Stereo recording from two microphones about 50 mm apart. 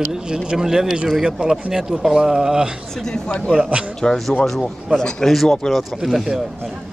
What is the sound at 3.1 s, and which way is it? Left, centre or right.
A man's voice, centre.